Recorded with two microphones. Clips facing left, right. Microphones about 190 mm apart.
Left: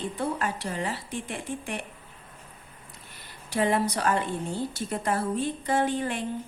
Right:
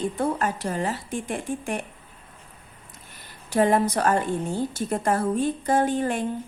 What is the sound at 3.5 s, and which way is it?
A woman's voice, 45° right (ahead or behind).